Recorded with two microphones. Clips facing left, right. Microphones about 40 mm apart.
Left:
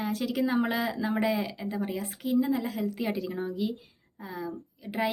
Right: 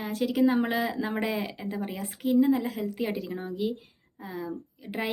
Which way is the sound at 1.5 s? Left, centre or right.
Right.